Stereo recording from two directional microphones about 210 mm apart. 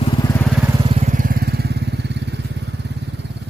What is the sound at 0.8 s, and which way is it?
Vehicle, 30° right (ahead or behind).